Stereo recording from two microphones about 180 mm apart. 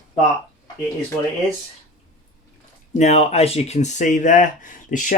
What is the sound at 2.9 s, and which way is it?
Speech, 40° left (ahead or behind).